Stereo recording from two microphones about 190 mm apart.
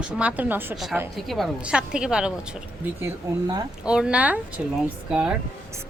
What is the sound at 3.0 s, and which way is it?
Speech, 15° right (ahead or behind).